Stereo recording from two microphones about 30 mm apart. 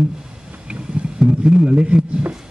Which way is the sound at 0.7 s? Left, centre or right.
Right.